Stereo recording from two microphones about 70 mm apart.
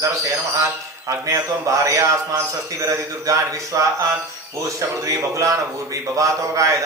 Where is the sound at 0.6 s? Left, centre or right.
Right.